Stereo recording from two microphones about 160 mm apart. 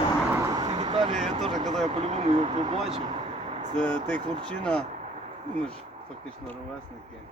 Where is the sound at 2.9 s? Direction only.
40° right (ahead or behind).